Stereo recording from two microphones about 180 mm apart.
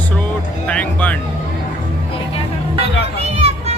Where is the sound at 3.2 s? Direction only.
35° right (ahead or behind).